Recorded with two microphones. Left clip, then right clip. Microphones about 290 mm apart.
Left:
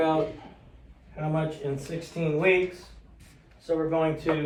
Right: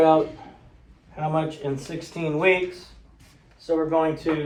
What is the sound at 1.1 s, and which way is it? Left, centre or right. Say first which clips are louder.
A man's voice: right 5 dB; centre.